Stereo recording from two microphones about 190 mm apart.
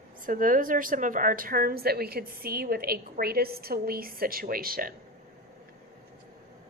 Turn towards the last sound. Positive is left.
turn(degrees=-50)  # may be behind; listen again after turning